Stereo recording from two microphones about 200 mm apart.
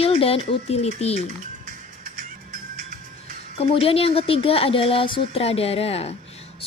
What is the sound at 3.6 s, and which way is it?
Speech, 30° left (ahead or behind).